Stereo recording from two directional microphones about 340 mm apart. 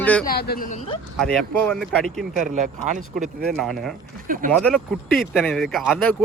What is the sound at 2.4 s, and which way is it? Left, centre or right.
Speech, right.